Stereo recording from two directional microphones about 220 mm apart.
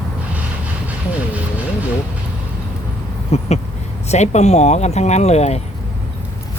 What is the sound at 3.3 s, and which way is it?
Speech, 30° left (ahead or behind).